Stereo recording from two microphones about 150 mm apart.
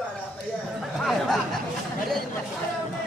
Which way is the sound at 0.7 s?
Centre (ahead or behind).